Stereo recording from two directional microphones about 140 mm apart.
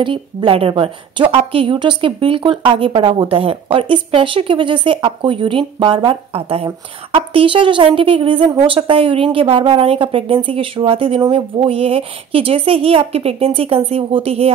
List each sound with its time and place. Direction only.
0.0 s a woman's voice: 35° right (ahead or behind)